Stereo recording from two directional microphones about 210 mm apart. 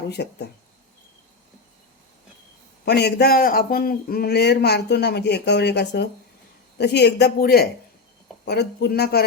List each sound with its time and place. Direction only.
0.1 s a man's voice: 55° left (ahead or behind)
2.8 s a man's voice: 50° left (ahead or behind)